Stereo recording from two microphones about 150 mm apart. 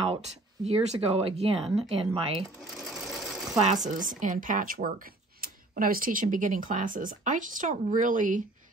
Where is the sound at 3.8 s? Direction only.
60° right (ahead or behind).